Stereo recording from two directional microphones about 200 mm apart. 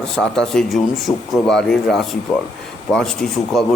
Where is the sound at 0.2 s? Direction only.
5° left (ahead or behind).